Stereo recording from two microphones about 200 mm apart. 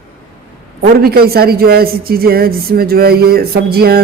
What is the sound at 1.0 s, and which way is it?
Speech, 50° right (ahead or behind).